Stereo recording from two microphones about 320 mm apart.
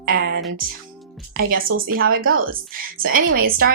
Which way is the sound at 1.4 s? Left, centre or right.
Right.